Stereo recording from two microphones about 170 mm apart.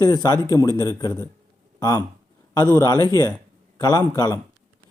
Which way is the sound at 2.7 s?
20° left (ahead or behind).